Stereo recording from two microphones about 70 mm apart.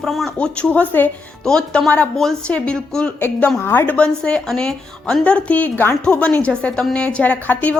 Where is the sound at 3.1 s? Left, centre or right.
Left.